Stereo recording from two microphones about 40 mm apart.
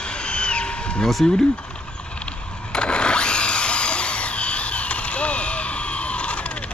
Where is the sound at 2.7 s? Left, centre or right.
Left.